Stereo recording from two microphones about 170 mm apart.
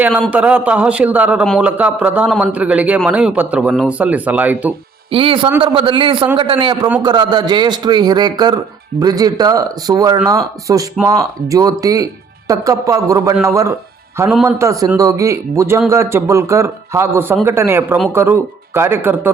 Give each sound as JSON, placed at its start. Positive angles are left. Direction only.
{"t": 0.3, "sound": "a man's voice", "side_deg": -10}
{"t": 5.1, "sound": "a man's voice", "side_deg": -30}